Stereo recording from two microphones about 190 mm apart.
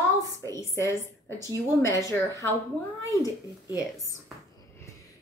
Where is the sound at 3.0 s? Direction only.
20° left (ahead or behind).